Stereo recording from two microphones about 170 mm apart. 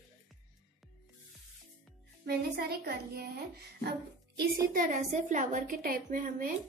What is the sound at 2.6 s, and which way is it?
A woman's voice, 65° right (ahead or behind).